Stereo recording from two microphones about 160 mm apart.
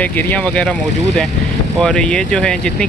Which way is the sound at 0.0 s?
10° left (ahead or behind).